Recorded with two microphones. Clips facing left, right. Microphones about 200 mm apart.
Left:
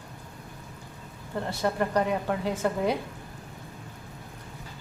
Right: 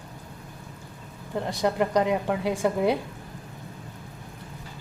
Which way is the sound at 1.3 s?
15° right (ahead or behind).